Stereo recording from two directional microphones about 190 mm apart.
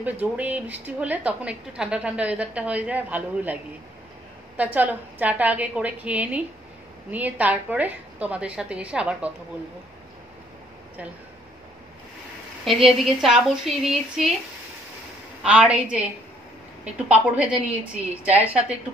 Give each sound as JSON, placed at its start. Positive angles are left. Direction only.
{"t": 0.0, "sound": "a woman's voice", "side_deg": -10}
{"t": 4.6, "sound": "a woman's voice", "side_deg": -10}
{"t": 12.6, "sound": "a woman's voice", "side_deg": 0}
{"t": 15.4, "sound": "a woman's voice", "side_deg": -5}